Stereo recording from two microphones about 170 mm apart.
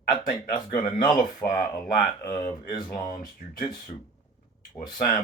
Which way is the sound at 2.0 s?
25° left (ahead or behind).